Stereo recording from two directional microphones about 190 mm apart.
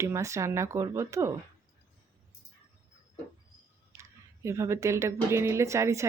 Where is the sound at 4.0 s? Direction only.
15° right (ahead or behind).